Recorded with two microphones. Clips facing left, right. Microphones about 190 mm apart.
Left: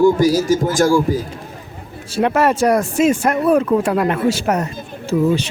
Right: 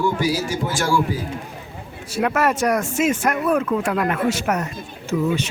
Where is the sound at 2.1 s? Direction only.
30° left (ahead or behind).